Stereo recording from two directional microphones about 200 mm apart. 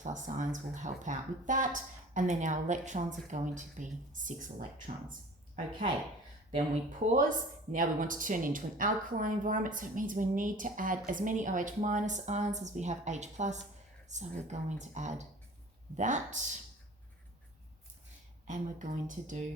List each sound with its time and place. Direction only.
0.0 s a woman's voice: 40° right (ahead or behind)
7.0 s a woman's voice: 40° right (ahead or behind)
18.4 s a woman's voice: 40° right (ahead or behind)